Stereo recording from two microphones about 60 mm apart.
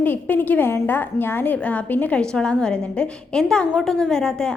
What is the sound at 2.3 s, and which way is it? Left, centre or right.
A woman's voice, centre.